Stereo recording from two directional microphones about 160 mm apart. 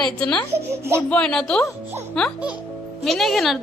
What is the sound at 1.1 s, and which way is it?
Speech, 5° left (ahead or behind).